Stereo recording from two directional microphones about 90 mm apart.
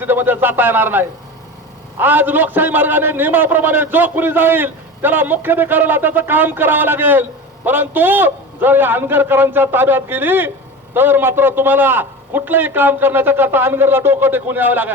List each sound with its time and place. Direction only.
0.0 s a man's voice: 25° right (ahead or behind)